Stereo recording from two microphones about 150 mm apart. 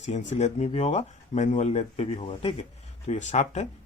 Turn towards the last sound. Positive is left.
turn(degrees=50)  # may be behind; listen again after turning